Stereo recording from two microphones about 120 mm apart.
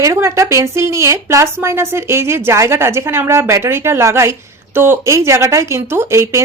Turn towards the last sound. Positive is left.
turn(degrees=-20)  # may be behind; listen again after turning